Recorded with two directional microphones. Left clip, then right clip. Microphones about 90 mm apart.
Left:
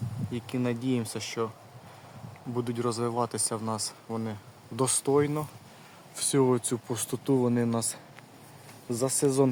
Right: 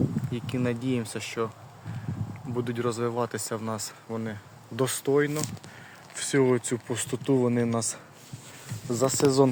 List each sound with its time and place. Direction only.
0.3 s speech: centre (ahead or behind)
2.6 s speech: 5° left (ahead or behind)